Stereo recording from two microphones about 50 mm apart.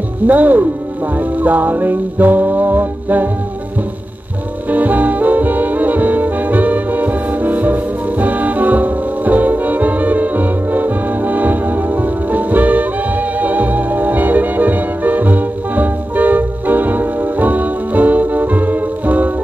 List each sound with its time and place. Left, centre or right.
0.3 s music: right
4.6 s brass instrument: right